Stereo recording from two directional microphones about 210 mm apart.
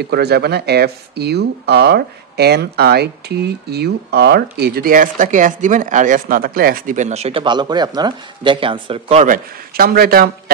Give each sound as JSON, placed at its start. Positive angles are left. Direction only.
{"t": 0.0, "sound": "speech", "side_deg": -50}